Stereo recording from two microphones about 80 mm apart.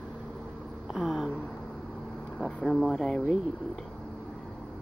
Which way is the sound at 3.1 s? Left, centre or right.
Centre.